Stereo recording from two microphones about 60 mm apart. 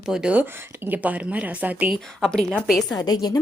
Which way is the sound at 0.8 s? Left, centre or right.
Right.